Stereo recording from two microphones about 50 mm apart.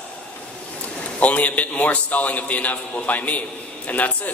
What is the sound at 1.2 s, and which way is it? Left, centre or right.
A man's voice, left.